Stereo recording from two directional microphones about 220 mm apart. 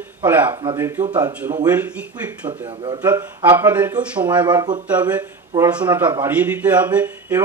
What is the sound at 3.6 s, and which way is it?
Speech, 10° right (ahead or behind).